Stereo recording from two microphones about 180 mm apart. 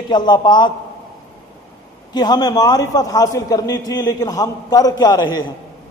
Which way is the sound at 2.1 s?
20° left (ahead or behind).